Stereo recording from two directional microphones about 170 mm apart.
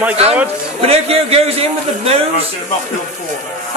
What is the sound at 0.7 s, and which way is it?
Speech, 35° right (ahead or behind).